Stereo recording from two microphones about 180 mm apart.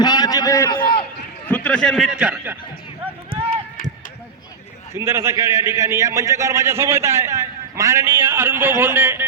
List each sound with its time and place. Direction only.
0.0 s a sound: 20° left (ahead or behind)
1.5 s a man's voice: 5° left (ahead or behind)
4.9 s a man's voice: 15° right (ahead or behind)